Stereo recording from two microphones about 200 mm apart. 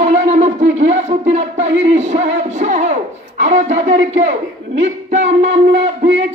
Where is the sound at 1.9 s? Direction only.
35° right (ahead or behind).